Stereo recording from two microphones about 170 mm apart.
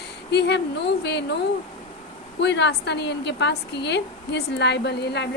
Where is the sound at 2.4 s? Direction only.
90° left.